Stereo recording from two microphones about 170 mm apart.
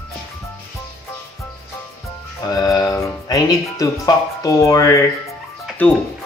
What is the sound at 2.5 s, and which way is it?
Speech, 20° left (ahead or behind).